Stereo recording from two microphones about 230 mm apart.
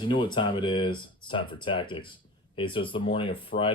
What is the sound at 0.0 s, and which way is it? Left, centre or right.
Speech, left.